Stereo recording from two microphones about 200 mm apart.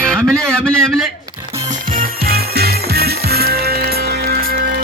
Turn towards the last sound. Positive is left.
turn(degrees=-50)  # may be behind; listen again after turning